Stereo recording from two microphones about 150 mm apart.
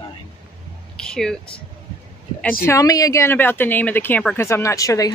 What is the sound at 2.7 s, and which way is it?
Speech, 20° left (ahead or behind).